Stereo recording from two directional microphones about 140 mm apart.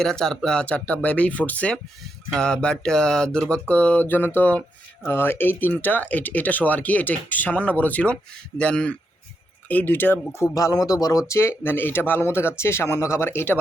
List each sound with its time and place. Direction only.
0.0 s speech: 5° left (ahead or behind)